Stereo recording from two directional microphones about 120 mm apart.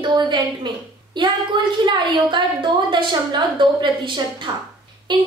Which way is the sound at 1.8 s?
40° right (ahead or behind).